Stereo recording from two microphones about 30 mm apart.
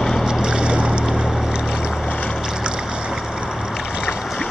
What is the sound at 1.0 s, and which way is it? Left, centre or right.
Boat, right.